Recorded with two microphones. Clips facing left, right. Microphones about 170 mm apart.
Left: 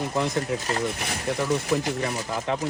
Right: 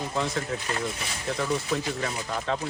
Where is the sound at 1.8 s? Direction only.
20° left (ahead or behind).